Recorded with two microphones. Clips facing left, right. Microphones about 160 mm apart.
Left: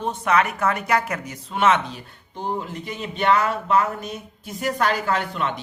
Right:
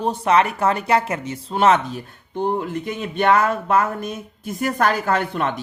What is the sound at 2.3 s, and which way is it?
Speech, 60° right (ahead or behind).